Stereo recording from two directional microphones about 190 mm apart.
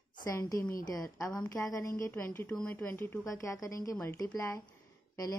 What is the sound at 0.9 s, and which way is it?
A woman's voice, 15° left (ahead or behind).